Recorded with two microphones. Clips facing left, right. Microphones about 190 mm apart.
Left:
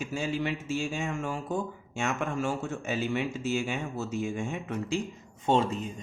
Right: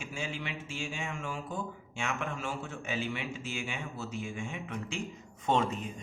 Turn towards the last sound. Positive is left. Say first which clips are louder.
# left 4 dB
turn(degrees=30)  # may be behind; listen again after turning